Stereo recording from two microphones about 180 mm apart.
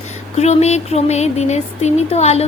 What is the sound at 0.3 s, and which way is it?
Speech, 35° left (ahead or behind).